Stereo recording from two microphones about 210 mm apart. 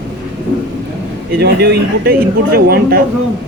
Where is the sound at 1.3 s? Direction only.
50° right (ahead or behind).